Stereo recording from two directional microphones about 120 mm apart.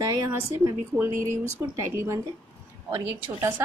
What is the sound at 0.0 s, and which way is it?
Speech, 30° right (ahead or behind).